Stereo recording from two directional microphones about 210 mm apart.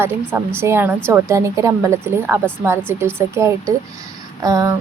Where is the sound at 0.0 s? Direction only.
10° right (ahead or behind).